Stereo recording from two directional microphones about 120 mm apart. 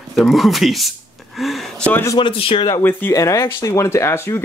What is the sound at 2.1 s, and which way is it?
Speech, 45° left (ahead or behind).